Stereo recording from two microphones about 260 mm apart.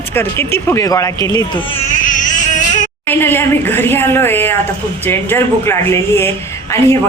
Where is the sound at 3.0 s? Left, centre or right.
Centre.